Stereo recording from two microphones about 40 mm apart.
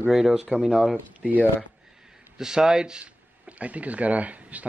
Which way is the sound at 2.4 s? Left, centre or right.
Centre.